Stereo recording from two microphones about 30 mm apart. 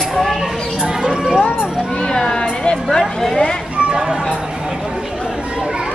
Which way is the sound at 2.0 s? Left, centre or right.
Left.